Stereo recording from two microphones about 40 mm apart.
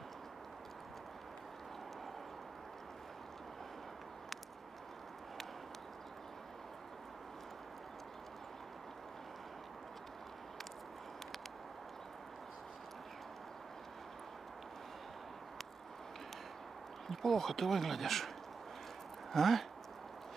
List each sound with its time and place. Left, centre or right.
17.1 s speech: centre
19.3 s speech: centre